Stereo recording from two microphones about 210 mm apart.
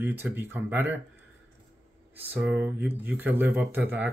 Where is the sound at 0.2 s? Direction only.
10° right (ahead or behind).